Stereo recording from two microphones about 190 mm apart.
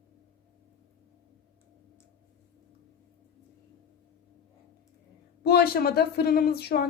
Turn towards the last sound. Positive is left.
turn(degrees=55)  # may be behind; listen again after turning